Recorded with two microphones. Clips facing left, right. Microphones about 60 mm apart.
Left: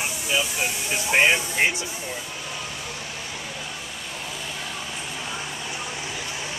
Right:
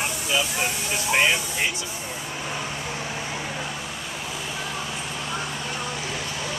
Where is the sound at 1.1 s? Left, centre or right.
Left.